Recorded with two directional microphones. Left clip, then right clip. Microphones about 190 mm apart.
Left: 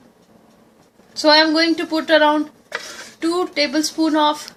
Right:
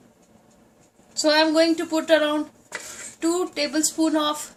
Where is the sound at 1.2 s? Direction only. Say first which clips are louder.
Left 5 dB; 30° left (ahead or behind).